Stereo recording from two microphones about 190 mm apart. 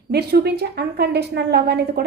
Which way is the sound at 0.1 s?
60° right (ahead or behind).